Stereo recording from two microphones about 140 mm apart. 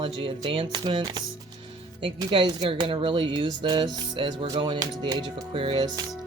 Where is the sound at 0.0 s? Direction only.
35° right (ahead or behind).